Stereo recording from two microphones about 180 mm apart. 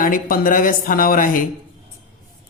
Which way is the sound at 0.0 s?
50° left (ahead or behind).